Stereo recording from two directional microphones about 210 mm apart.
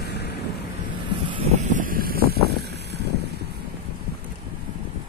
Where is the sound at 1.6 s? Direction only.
40° right (ahead or behind).